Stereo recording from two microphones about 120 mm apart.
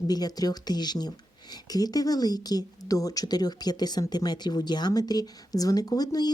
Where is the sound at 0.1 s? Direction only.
35° left (ahead or behind).